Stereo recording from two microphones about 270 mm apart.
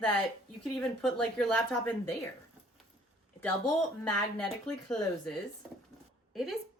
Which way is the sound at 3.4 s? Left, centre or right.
Centre.